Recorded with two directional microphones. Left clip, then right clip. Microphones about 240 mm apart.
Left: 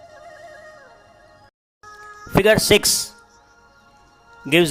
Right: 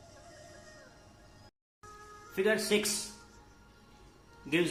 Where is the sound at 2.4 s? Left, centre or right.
Left.